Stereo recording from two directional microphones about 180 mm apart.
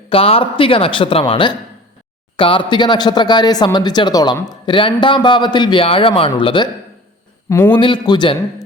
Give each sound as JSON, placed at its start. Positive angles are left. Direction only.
{"t": 0.1, "sound": "speech", "side_deg": 30}
{"t": 7.7, "sound": "speech", "side_deg": 25}